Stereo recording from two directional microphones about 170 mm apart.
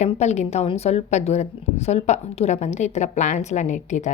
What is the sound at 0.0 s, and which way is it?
Speech, 40° left (ahead or behind).